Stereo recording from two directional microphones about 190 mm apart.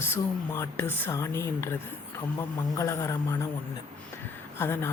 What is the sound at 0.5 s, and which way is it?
Speech, 10° left (ahead or behind).